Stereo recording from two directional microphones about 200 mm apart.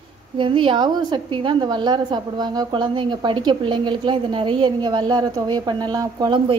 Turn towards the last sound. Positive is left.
turn(degrees=-20)  # may be behind; listen again after turning